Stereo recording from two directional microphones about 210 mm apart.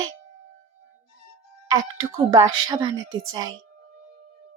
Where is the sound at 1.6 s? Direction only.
15° right (ahead or behind).